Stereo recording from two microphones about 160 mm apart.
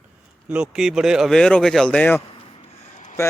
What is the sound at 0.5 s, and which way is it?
A man's voice, 5° right (ahead or behind).